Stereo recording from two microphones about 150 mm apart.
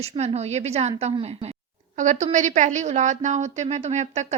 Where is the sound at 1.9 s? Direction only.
55° right (ahead or behind).